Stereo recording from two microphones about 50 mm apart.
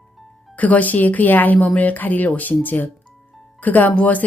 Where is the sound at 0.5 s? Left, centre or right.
Left.